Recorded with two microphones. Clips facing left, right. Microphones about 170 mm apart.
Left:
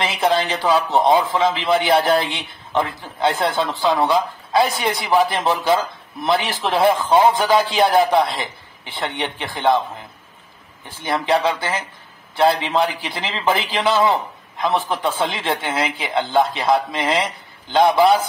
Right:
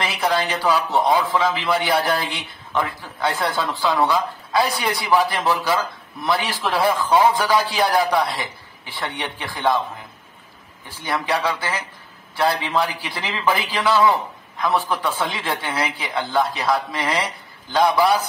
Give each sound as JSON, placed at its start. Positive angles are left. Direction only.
{"t": 0.0, "sound": "a man's voice", "side_deg": 25}
{"t": 11.1, "sound": "a man's voice", "side_deg": 25}